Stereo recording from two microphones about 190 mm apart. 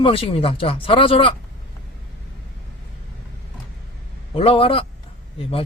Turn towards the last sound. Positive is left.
turn(degrees=30)  # may be behind; listen again after turning